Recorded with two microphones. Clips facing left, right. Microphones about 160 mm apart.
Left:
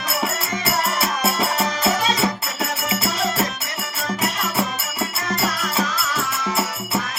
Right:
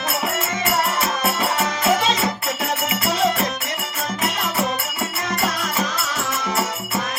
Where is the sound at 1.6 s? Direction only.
20° right (ahead or behind).